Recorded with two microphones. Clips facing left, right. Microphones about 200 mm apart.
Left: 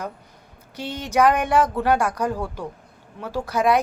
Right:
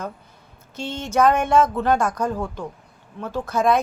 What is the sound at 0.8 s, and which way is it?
A woman's voice, 15° left (ahead or behind).